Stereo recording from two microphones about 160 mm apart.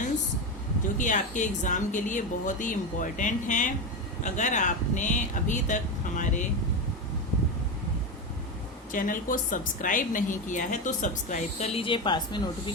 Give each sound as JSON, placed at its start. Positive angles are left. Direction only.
{"t": 0.9, "sound": "a woman's voice", "side_deg": 50}
{"t": 8.9, "sound": "a woman's voice", "side_deg": 55}